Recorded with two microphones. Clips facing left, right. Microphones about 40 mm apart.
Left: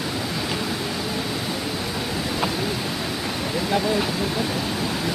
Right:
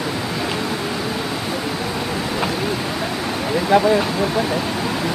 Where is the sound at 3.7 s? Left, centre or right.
Right.